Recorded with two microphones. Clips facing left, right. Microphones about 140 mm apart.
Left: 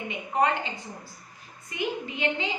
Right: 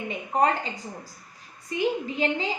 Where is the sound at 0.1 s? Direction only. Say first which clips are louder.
Right 2 dB; 40° right (ahead or behind).